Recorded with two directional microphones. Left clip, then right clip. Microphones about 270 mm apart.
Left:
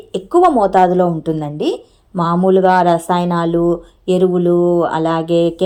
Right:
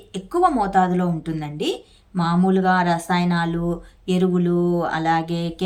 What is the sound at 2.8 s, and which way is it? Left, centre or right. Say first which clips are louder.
Speech: left 7 dB; left.